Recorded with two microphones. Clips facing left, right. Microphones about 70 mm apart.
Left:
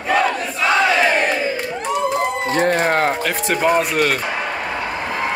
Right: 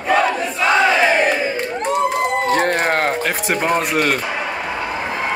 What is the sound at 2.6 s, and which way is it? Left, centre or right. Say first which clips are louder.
Speech: left 1 dB; right.